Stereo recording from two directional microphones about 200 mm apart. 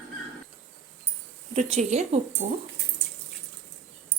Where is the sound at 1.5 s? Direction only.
35° right (ahead or behind).